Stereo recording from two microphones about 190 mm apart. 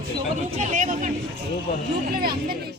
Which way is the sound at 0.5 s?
40° right (ahead or behind).